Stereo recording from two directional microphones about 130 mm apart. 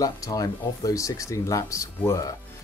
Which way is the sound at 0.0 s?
25° left (ahead or behind).